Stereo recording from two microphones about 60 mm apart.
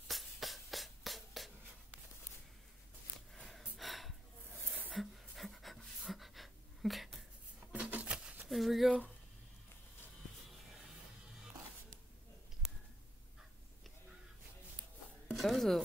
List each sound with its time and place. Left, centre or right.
0.1 s a sound: centre
3.3 s gasp: centre
4.9 s pant: centre
7.7 s a sound: right
8.5 s speech: centre
15.3 s music: centre